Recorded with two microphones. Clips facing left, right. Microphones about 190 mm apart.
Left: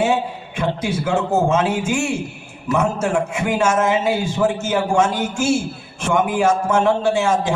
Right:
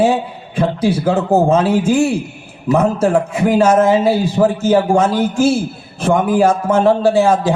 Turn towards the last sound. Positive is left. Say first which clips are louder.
# right 5 dB
turn(degrees=-35)  # may be behind; listen again after turning